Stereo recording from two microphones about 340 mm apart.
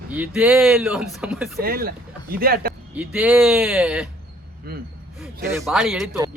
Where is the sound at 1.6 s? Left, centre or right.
Right.